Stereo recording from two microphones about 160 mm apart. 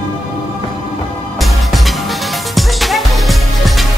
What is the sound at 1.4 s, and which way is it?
Music, centre (ahead or behind).